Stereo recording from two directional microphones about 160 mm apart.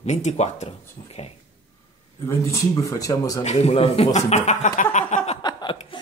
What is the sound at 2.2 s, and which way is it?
Speech, 15° left (ahead or behind).